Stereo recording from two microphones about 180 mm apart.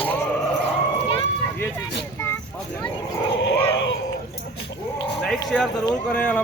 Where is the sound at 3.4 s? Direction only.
80° left.